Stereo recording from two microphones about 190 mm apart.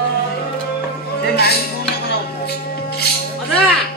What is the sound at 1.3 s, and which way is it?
Speech, 55° left (ahead or behind).